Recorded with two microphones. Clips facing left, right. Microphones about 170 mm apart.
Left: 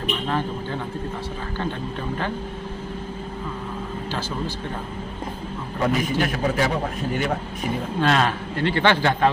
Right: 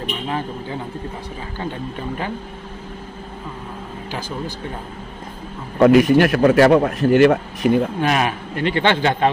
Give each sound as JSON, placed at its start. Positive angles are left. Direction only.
{"t": 5.8, "sound": "a man's voice", "side_deg": -75}
{"t": 8.0, "sound": "a man's voice", "side_deg": -15}